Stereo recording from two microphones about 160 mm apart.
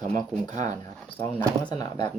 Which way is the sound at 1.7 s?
25° left (ahead or behind).